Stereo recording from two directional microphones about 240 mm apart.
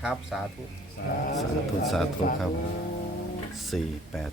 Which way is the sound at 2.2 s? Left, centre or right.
Left.